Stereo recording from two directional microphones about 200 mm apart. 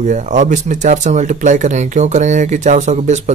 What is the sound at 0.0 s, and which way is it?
Speech, 40° right (ahead or behind).